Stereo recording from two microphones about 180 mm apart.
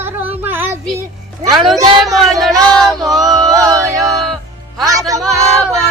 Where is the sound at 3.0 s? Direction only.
20° right (ahead or behind).